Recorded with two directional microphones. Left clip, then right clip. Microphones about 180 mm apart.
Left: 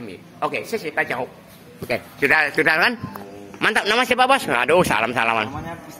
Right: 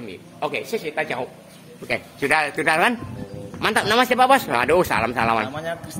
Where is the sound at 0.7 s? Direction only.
10° left (ahead or behind).